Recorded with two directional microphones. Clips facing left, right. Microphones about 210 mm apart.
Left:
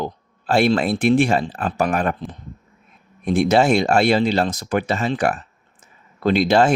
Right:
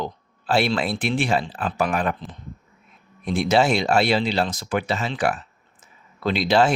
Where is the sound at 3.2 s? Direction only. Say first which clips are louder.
Left 3 dB; 45° left (ahead or behind).